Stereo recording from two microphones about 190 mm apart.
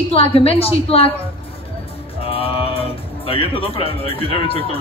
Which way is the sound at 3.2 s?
30° left (ahead or behind).